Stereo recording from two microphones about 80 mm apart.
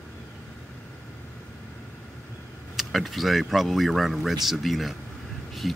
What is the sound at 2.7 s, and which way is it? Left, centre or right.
Speech, centre.